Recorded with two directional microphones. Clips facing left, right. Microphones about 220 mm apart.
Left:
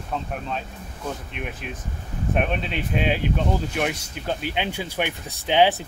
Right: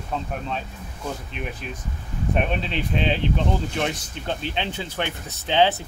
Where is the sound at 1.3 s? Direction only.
Centre (ahead or behind).